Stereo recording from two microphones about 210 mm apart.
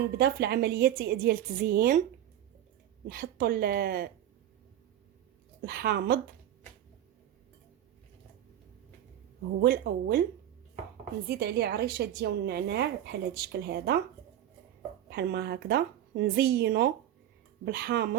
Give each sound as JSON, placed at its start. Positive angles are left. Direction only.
{"t": 0.2, "sound": "a woman's voice", "side_deg": -50}
{"t": 3.1, "sound": "a woman's voice", "side_deg": -45}
{"t": 5.6, "sound": "a woman's voice", "side_deg": -50}
{"t": 9.6, "sound": "a woman's voice", "side_deg": -45}
{"t": 11.3, "sound": "a woman's voice", "side_deg": -50}
{"t": 15.1, "sound": "a woman's voice", "side_deg": -55}